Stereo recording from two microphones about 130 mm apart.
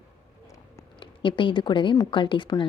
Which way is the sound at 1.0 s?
40° left (ahead or behind).